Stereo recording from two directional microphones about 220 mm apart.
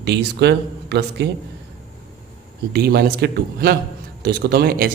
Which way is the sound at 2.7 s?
45° right (ahead or behind).